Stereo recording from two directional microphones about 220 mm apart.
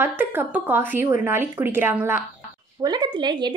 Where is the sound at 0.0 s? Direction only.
10° right (ahead or behind).